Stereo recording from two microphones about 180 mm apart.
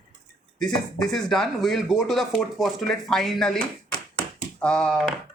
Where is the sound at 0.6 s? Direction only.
5° left (ahead or behind).